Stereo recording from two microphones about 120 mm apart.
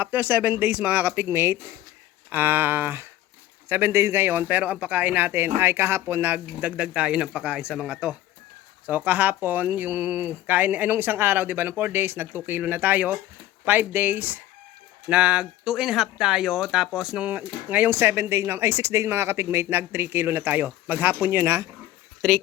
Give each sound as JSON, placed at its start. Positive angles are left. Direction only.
{"t": 0.0, "sound": "speech", "side_deg": -15}